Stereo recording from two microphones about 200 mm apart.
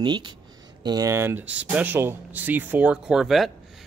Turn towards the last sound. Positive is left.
turn(degrees=0)  # may be behind; listen again after turning